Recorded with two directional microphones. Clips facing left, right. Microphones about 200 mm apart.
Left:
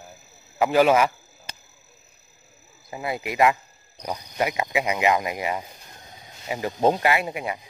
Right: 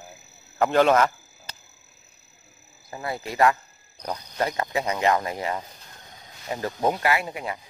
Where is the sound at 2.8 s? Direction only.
15° left (ahead or behind).